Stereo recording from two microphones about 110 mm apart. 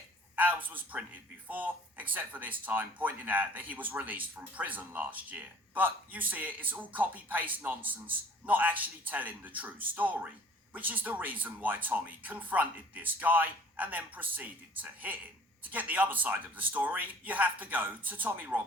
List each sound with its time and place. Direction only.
0.3 s a man's voice: 15° right (ahead or behind)